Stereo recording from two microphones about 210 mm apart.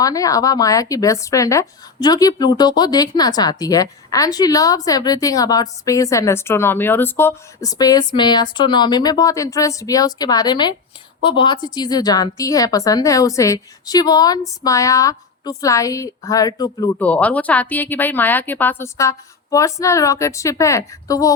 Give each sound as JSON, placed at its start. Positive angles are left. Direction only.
{"t": 0.0, "sound": "speech", "side_deg": 15}
{"t": 17.0, "sound": "speech", "side_deg": 5}